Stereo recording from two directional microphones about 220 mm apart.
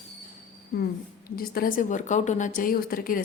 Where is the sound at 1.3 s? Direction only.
40° left (ahead or behind).